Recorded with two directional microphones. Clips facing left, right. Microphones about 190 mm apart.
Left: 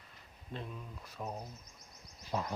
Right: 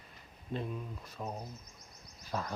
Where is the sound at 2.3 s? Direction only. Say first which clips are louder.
Left 1 dB; 20° left (ahead or behind).